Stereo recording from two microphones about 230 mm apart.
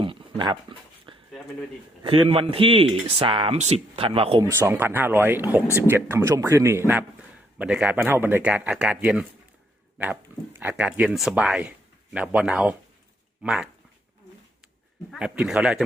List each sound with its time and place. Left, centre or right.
0.0 s dog: right
2.0 s speech: right
4.4 s speech: centre
15.1 s speech: centre